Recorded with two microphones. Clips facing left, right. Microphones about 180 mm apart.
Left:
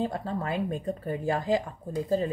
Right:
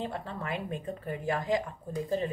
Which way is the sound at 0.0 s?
35° left (ahead or behind).